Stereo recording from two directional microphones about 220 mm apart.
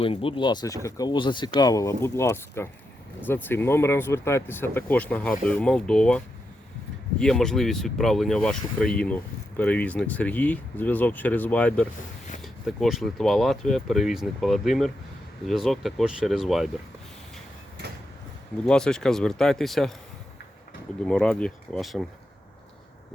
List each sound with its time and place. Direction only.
0.0 s speech: 25° left (ahead or behind); by 16.6 s centre (ahead or behind)
18.6 s speech: 5° left (ahead or behind)
21.0 s speech: 5° left (ahead or behind)